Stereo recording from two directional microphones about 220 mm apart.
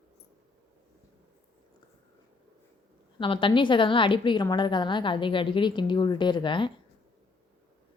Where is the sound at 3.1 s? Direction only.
25° left (ahead or behind).